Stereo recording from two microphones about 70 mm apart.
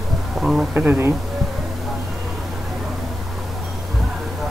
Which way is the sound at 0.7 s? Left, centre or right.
Right.